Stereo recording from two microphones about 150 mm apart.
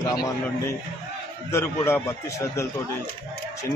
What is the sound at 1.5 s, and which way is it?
Speech, 15° left (ahead or behind).